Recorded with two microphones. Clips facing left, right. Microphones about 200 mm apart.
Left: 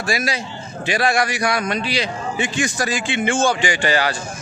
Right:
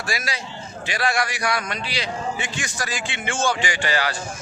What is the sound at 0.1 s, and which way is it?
A man's voice, 20° left (ahead or behind).